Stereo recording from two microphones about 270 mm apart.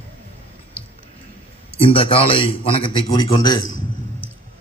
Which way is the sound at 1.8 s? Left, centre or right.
Centre.